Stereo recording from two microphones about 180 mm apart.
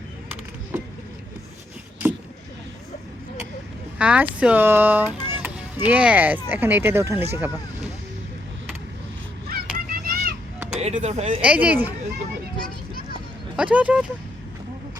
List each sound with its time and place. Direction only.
3.9 s speech: 5° right (ahead or behind)
9.5 s children playing: 55° right (ahead or behind)
10.8 s speech: 40° right (ahead or behind)
11.3 s speech: 5° right (ahead or behind)
13.6 s speech: 5° right (ahead or behind)